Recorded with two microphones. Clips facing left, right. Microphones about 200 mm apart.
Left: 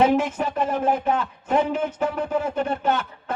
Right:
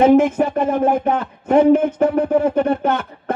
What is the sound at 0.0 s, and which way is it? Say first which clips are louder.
Speech: right 7 dB; 55° right (ahead or behind).